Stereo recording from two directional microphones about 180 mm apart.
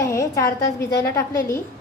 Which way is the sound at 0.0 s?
20° left (ahead or behind).